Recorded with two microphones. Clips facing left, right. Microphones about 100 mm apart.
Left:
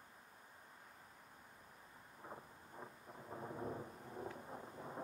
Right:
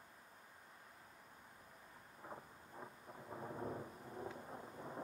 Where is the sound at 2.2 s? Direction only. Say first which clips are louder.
Right 1 dB; centre (ahead or behind).